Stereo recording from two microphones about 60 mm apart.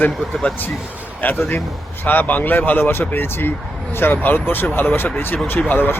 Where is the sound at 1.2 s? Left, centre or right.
Left.